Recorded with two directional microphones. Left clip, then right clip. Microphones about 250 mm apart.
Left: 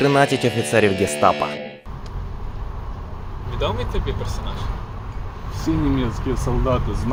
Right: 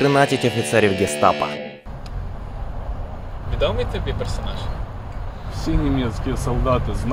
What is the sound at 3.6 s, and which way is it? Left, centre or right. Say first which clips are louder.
Speech: right 2 dB; centre.